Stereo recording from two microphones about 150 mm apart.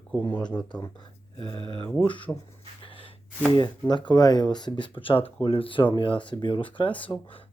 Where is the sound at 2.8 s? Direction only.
35° left (ahead or behind).